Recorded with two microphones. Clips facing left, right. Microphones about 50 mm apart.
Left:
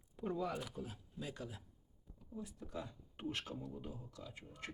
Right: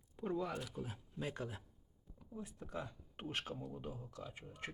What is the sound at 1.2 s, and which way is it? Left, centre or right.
Speech, right.